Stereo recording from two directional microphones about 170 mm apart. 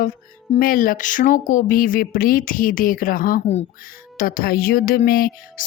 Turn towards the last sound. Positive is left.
turn(degrees=60)  # may be behind; listen again after turning